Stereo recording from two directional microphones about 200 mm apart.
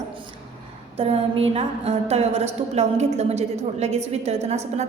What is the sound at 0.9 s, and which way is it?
A woman's voice, 30° right (ahead or behind).